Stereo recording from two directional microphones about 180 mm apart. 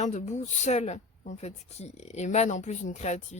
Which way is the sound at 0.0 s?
40° left (ahead or behind).